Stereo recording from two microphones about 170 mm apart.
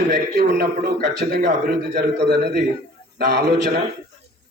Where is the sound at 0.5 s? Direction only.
70° right (ahead or behind).